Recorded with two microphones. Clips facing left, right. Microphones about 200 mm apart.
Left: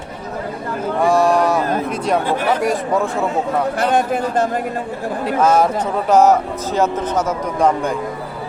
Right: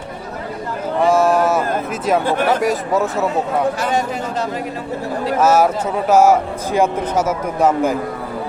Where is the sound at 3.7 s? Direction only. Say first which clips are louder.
Left 3 dB; 55° left (ahead or behind).